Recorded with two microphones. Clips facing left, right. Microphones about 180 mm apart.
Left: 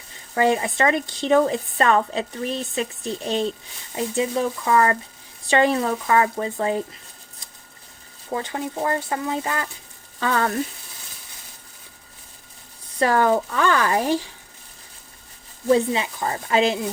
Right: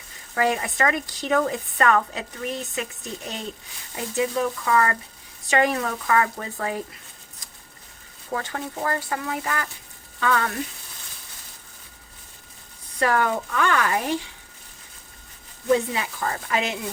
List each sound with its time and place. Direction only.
0.3 s speech: 25° left (ahead or behind)
8.3 s speech: 20° left (ahead or behind)
13.0 s speech: 30° left (ahead or behind)
15.7 s speech: 25° left (ahead or behind)